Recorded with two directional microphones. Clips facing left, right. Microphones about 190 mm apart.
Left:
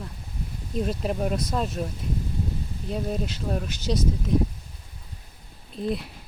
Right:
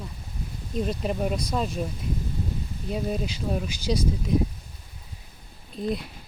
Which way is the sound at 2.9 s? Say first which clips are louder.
Even; centre (ahead or behind).